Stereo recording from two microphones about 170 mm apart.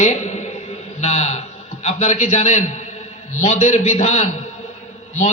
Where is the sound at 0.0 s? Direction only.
45° left (ahead or behind).